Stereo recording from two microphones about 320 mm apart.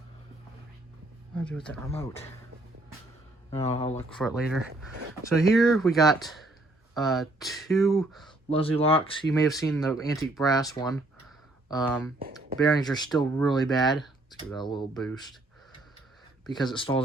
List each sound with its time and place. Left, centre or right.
1.4 s speech: centre
3.5 s speech: centre
3.9 s speech: centre
8.4 s speech: centre
13.1 s speech: centre
13.5 s speech: centre
16.5 s speech: centre